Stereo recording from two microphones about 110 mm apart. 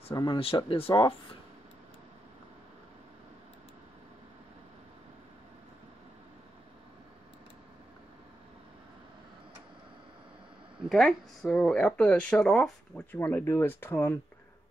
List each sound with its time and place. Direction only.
0.1 s speech: 40° left (ahead or behind)
0.6 s speech: 55° left (ahead or behind)
10.9 s speech: centre (ahead or behind)
12.9 s speech: 15° left (ahead or behind)